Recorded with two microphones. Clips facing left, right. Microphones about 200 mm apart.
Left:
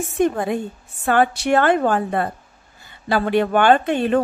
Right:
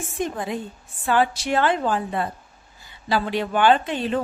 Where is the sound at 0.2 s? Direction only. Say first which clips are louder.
Left 7 dB; 60° left (ahead or behind).